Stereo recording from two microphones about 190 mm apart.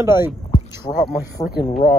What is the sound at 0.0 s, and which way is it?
Speech, 10° right (ahead or behind).